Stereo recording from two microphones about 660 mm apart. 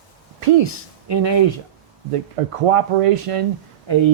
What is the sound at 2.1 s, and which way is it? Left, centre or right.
Speech, right.